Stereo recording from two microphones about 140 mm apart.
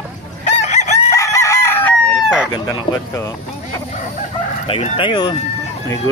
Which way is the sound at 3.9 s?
55° left (ahead or behind).